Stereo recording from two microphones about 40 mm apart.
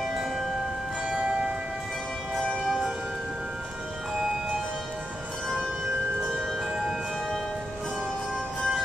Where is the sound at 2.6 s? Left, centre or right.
Centre.